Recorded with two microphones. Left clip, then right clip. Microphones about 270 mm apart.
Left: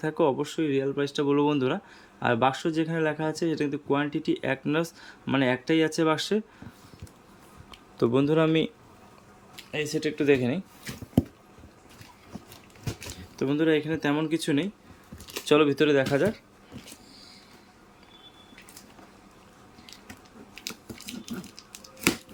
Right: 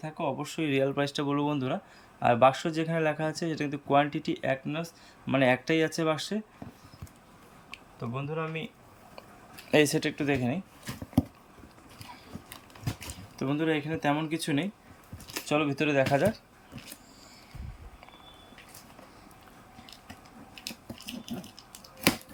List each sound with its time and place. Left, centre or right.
0.0 s speech: centre
7.9 s speech: left
9.7 s speech: centre
13.3 s speech: centre
20.6 s a sound: centre